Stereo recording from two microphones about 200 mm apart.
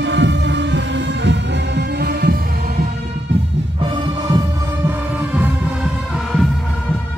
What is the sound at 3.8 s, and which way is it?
Music, 25° right (ahead or behind).